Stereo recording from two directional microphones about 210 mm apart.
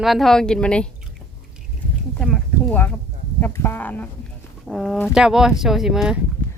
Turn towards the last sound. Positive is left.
turn(degrees=0)  # may be behind; listen again after turning